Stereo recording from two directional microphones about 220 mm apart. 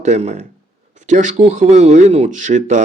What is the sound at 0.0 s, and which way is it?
Speech, 30° right (ahead or behind).